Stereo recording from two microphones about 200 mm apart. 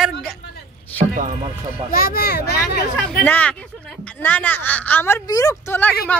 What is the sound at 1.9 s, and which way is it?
Speech, 50° left (ahead or behind).